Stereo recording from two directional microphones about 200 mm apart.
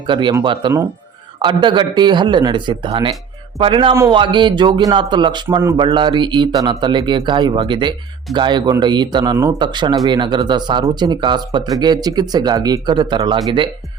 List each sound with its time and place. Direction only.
0.1 s speech: 25° right (ahead or behind)